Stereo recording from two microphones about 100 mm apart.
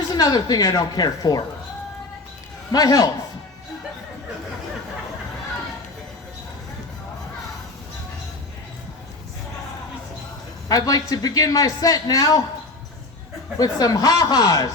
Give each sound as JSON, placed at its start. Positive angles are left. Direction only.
{"t": 0.1, "sound": "speech", "side_deg": 40}
{"t": 2.7, "sound": "speech", "side_deg": 40}
{"t": 10.7, "sound": "speech", "side_deg": 40}
{"t": 13.6, "sound": "speech", "side_deg": 40}